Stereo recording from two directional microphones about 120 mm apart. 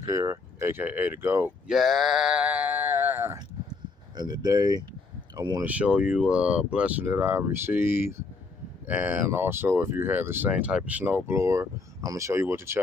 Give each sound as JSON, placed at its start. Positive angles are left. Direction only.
{"t": 0.1, "sound": "speech", "side_deg": -20}
{"t": 1.7, "sound": "speech", "side_deg": 0}
{"t": 4.2, "sound": "speech", "side_deg": -35}
{"t": 5.6, "sound": "speech", "side_deg": -10}